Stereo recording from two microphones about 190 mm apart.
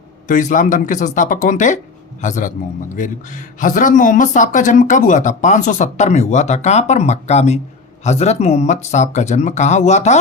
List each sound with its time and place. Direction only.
0.3 s speech: 45° left (ahead or behind)